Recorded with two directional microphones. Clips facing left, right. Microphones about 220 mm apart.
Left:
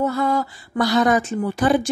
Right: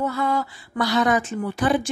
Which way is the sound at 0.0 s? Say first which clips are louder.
Left 3 dB; 40° left (ahead or behind).